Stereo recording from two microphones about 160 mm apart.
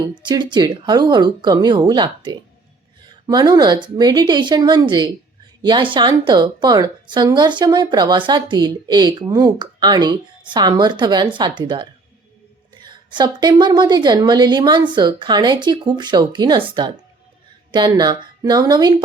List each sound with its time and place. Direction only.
0.1 s a woman's voice: 30° right (ahead or behind)